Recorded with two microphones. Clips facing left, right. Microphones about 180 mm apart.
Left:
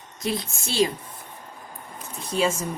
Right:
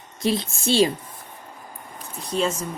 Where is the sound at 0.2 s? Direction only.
30° right (ahead or behind).